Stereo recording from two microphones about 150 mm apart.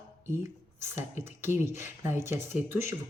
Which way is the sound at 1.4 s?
15° right (ahead or behind).